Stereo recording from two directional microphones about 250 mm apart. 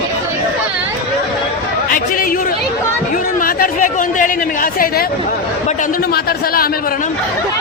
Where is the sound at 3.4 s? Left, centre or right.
Left.